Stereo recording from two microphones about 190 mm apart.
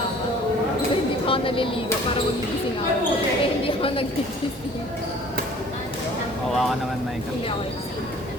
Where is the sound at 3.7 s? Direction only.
30° left (ahead or behind).